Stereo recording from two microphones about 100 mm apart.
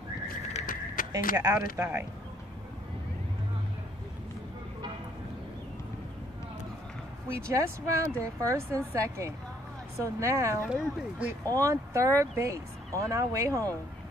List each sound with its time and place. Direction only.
1.1 s speech: 35° right (ahead or behind)
1.8 s speech: 20° right (ahead or behind)
7.2 s speech: 30° right (ahead or behind)
10.7 s speech: 15° right (ahead or behind)
11.4 s speech: 30° right (ahead or behind)